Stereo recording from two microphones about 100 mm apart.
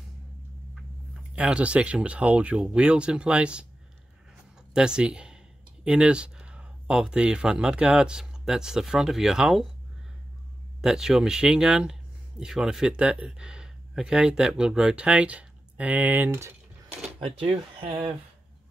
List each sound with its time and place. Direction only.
1.3 s speech: 10° right (ahead or behind)
4.7 s speech: 10° right (ahead or behind)
10.8 s speech: 5° right (ahead or behind); by 16.5 s 25° right (ahead or behind)
17.2 s speech: 65° right (ahead or behind)